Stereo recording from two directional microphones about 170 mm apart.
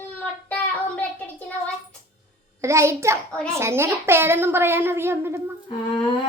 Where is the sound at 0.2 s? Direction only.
10° left (ahead or behind).